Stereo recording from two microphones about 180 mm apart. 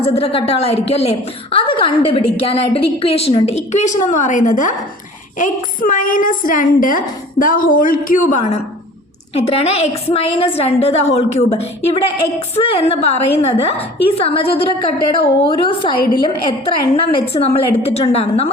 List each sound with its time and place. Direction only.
0.0 s a woman's voice: 35° left (ahead or behind)
12.5 s a woman's voice: 35° left (ahead or behind)